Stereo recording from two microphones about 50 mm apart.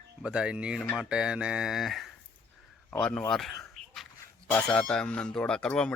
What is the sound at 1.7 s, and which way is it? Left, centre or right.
Speech, centre.